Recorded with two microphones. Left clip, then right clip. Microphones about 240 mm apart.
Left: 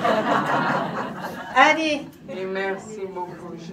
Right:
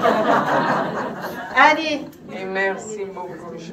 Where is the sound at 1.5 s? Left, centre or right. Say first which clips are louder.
Right 2 dB; centre.